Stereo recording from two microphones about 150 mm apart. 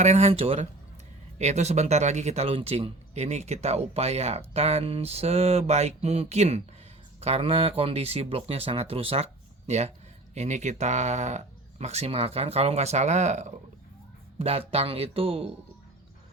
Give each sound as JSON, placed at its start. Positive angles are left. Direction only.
{"t": 0.0, "sound": "speech", "side_deg": -50}